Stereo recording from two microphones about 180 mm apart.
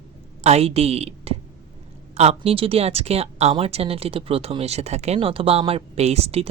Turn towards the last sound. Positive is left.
turn(degrees=-35)  # may be behind; listen again after turning